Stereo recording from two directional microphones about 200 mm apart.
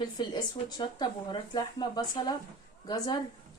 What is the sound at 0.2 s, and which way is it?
Speech, 20° left (ahead or behind).